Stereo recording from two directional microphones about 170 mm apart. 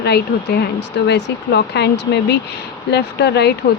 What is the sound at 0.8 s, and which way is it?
Speech, 85° left.